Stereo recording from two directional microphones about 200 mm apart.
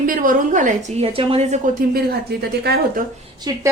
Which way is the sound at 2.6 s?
55° right (ahead or behind).